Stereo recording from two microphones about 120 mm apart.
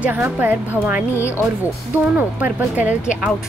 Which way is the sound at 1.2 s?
20° left (ahead or behind).